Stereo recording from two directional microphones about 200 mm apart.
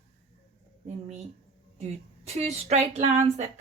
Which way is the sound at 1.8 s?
30° right (ahead or behind).